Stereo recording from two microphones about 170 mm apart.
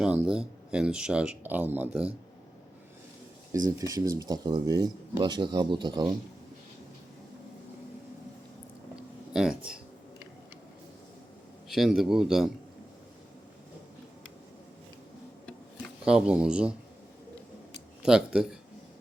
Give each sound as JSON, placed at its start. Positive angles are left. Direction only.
{"t": 0.0, "sound": "speech", "side_deg": -5}
{"t": 3.7, "sound": "speech", "side_deg": -20}
{"t": 9.3, "sound": "speech", "side_deg": -5}
{"t": 11.7, "sound": "speech", "side_deg": 0}
{"t": 16.0, "sound": "speech", "side_deg": -5}
{"t": 18.0, "sound": "speech", "side_deg": -5}